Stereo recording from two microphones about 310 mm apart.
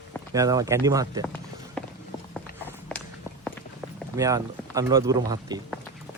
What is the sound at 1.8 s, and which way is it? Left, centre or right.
Run, centre.